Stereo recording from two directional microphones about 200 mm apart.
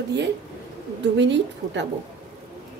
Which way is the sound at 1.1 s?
60° right (ahead or behind).